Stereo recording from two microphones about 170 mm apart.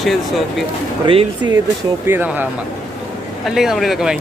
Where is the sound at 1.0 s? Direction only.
25° right (ahead or behind).